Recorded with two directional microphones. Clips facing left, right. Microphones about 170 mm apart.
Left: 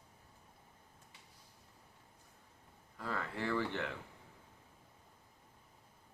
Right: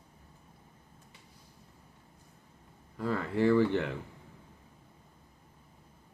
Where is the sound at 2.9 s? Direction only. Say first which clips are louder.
Right 10 dB; 25° right (ahead or behind).